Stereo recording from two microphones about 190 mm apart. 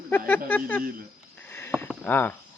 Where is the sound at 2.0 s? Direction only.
10° left (ahead or behind).